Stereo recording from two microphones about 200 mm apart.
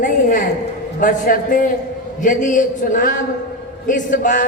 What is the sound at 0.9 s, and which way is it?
A man's voice, 45° left (ahead or behind).